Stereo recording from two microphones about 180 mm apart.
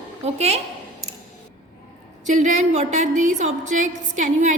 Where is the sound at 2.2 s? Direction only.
45° right (ahead or behind).